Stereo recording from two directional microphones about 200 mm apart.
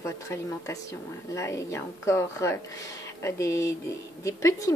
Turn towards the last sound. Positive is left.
turn(degrees=15)  # may be behind; listen again after turning